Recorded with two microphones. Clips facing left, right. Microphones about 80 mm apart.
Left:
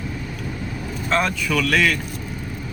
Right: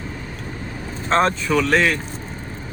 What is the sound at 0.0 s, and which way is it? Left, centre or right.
Vehicle, right.